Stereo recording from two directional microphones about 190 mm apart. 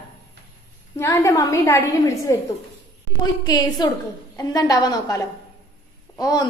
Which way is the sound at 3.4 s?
20° left (ahead or behind).